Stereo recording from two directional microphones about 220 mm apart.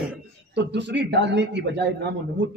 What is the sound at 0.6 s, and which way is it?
A man's voice, 50° right (ahead or behind).